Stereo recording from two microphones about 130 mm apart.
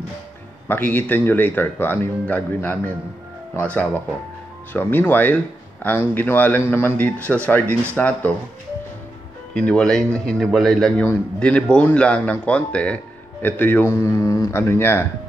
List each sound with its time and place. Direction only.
0.7 s a man's voice: 15° left (ahead or behind)
9.5 s a man's voice: 10° left (ahead or behind)